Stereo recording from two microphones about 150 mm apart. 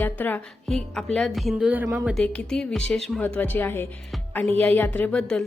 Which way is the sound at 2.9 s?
5° left (ahead or behind).